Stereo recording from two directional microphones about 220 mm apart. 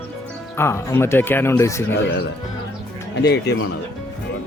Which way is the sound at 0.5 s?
10° left (ahead or behind).